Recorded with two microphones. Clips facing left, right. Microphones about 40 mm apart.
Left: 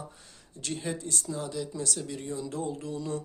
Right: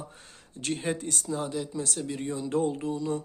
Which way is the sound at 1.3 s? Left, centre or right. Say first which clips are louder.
Right 5 dB; right.